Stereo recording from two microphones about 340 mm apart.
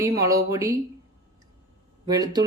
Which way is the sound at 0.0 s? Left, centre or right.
Centre.